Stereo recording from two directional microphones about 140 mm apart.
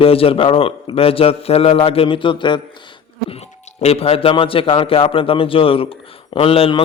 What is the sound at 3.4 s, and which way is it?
A man's voice, 50° left (ahead or behind).